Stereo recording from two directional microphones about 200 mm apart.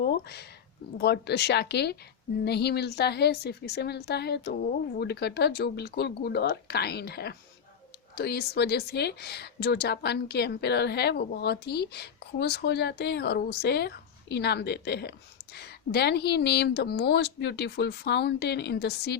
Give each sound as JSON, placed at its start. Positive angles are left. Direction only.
{"t": 0.0, "sound": "a woman's voice", "side_deg": 55}